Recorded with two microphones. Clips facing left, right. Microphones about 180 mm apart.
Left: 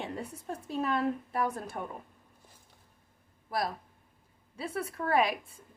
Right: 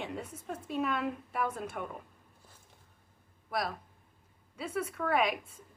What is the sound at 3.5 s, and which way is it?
A woman's voice, 30° left (ahead or behind).